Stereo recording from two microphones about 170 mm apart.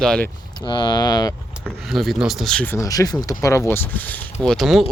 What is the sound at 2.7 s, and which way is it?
Speech, 20° left (ahead or behind).